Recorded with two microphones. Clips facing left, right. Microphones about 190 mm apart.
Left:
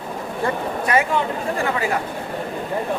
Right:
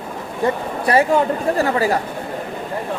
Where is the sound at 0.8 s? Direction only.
35° right (ahead or behind).